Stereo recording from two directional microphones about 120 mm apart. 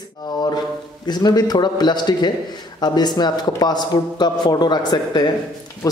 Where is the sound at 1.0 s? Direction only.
35° left (ahead or behind).